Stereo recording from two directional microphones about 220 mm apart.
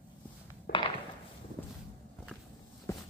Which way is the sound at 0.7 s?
45° left (ahead or behind).